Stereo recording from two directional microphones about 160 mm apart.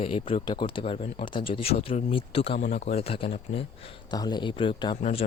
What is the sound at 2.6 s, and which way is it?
Speech, 50° left (ahead or behind).